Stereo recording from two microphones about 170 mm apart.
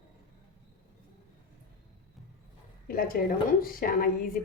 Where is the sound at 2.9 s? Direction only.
55° left (ahead or behind).